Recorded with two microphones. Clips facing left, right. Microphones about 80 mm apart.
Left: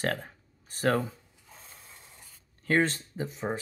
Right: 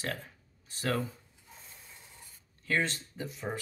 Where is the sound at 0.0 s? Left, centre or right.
Left.